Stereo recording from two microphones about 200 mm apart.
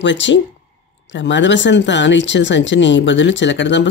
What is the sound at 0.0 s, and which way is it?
Speech, 65° left (ahead or behind).